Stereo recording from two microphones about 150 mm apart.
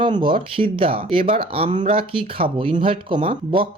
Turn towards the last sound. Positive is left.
turn(degrees=-35)  # may be behind; listen again after turning